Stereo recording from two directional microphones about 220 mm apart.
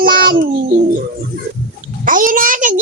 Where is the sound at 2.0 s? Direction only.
35° right (ahead or behind).